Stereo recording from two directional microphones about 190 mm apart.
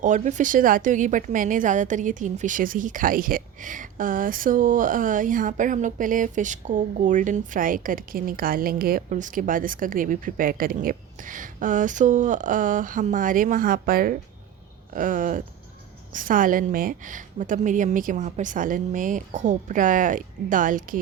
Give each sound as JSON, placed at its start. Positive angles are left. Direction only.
{"t": 0.0, "sound": "a woman's voice", "side_deg": -40}